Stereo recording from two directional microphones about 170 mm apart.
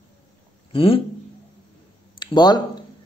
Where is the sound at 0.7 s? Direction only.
30° left (ahead or behind).